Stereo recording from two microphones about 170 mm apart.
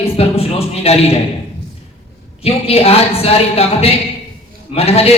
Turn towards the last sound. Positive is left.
turn(degrees=35)  # may be behind; listen again after turning